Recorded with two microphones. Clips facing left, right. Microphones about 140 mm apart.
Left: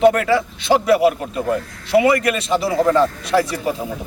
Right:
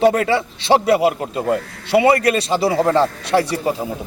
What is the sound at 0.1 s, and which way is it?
A man's voice, 25° right (ahead or behind).